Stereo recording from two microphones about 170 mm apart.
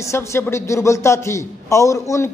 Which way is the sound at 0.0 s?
15° left (ahead or behind).